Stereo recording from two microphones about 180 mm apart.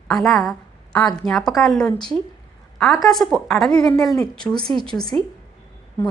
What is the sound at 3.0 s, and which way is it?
A woman's voice, centre (ahead or behind).